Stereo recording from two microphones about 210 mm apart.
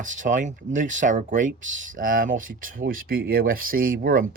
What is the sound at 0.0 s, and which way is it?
Speech, 35° right (ahead or behind).